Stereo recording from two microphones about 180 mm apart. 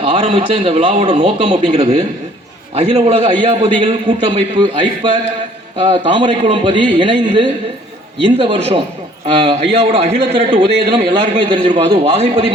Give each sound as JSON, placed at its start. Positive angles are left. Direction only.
{"t": 0.0, "sound": "a man's voice", "side_deg": -30}